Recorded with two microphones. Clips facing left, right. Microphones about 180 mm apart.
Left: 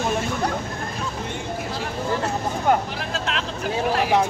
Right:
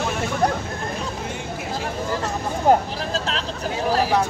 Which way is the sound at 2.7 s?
35° right (ahead or behind).